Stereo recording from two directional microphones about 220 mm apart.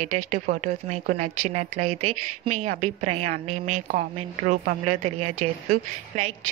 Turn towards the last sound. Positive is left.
turn(degrees=-30)  # may be behind; listen again after turning